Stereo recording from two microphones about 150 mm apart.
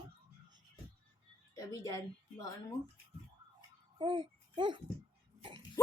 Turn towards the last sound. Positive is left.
turn(degrees=-30)  # may be behind; listen again after turning